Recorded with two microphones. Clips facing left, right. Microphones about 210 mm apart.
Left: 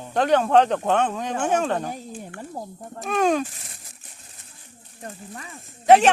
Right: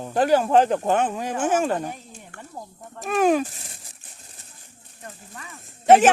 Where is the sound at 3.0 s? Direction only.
5° right (ahead or behind).